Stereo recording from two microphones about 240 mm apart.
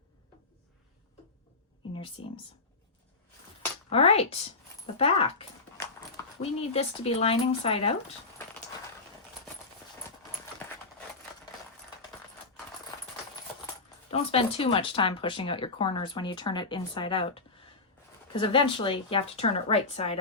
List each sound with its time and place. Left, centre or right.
2.2 s speech: left
3.8 s speech: left
14.1 s speech: left